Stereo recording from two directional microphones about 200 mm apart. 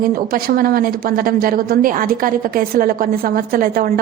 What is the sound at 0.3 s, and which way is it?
A woman's voice, 45° right (ahead or behind).